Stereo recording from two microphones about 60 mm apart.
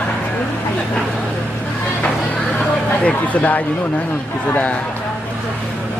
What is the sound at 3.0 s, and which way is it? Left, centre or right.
Speech, left.